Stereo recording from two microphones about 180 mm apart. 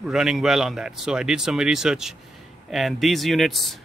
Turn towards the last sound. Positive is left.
turn(degrees=0)  # may be behind; listen again after turning